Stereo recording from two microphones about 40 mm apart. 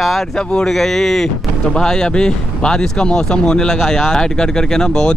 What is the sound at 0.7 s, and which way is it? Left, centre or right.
Speech, centre.